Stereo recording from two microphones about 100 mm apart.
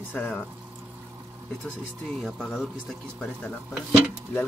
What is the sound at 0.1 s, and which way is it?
Speech, 20° left (ahead or behind).